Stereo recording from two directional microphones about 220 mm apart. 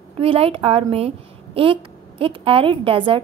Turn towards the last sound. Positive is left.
turn(degrees=-25)  # may be behind; listen again after turning